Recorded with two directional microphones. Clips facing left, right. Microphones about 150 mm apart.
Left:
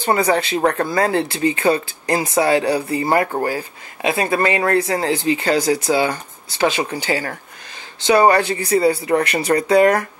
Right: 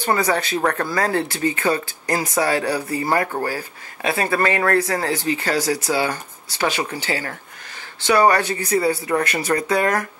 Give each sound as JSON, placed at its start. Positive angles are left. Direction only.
{"t": 0.2, "sound": "speech", "side_deg": 30}
{"t": 8.1, "sound": "speech", "side_deg": 25}